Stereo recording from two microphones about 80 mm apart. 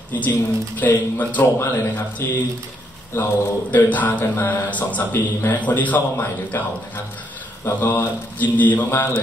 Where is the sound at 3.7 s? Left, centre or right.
Centre.